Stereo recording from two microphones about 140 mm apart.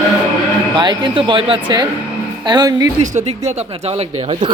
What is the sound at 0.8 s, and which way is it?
A man's voice, 30° right (ahead or behind).